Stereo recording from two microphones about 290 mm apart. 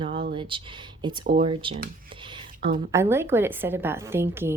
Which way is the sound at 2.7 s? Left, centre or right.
Centre.